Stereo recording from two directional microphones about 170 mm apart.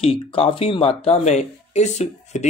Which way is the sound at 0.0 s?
35° left (ahead or behind).